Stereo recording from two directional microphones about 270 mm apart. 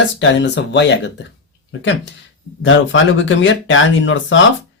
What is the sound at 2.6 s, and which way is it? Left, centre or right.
Speech, left.